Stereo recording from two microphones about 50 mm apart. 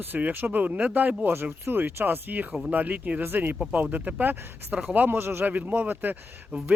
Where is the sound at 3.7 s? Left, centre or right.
Right.